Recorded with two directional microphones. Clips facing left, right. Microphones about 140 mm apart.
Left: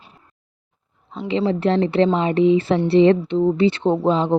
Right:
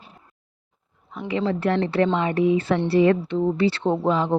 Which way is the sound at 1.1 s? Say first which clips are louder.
Left 4 dB; 25° left (ahead or behind).